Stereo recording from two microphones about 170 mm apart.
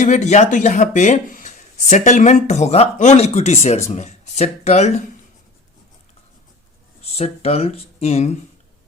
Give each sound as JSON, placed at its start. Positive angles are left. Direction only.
{"t": 0.0, "sound": "speech", "side_deg": 45}
{"t": 7.0, "sound": "speech", "side_deg": 35}